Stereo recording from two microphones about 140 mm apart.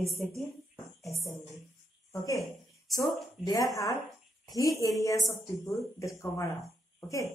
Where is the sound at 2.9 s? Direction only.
Centre (ahead or behind).